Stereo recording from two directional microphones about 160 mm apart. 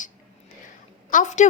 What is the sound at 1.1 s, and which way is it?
Speech, 50° left (ahead or behind).